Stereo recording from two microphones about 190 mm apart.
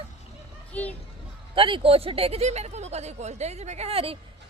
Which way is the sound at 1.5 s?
30° right (ahead or behind).